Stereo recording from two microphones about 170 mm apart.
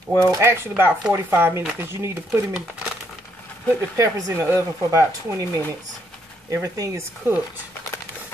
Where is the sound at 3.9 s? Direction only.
15° right (ahead or behind).